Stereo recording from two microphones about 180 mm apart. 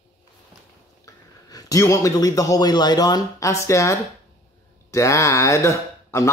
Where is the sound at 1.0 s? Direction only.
20° left (ahead or behind).